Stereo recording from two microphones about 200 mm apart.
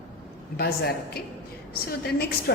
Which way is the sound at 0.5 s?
50° left (ahead or behind).